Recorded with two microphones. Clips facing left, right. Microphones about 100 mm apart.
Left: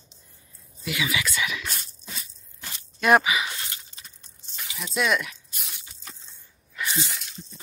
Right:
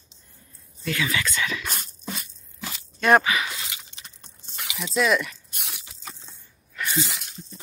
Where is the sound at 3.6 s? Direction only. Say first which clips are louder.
Right 1 dB; 90° right.